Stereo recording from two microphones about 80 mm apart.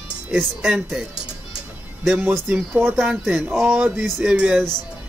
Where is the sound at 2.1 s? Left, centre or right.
Right.